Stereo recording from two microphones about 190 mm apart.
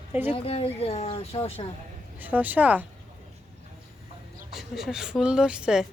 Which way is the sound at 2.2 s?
10° right (ahead or behind).